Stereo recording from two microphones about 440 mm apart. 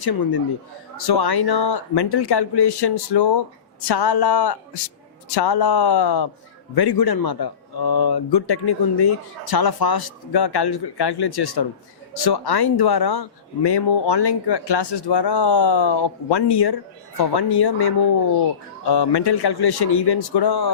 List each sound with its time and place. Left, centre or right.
0.0 s speech: left